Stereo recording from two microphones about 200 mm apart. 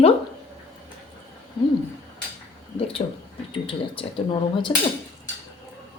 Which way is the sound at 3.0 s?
30° left (ahead or behind).